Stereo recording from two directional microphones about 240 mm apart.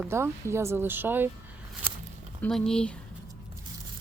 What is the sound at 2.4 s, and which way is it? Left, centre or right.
Speech, centre.